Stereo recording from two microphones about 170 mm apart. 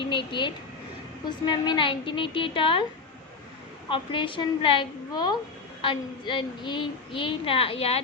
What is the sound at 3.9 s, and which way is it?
Speech, 30° left (ahead or behind).